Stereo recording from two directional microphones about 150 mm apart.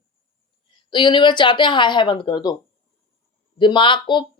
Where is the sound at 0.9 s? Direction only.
30° left (ahead or behind).